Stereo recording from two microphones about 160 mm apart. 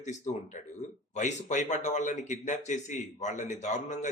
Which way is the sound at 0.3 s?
45° left (ahead or behind).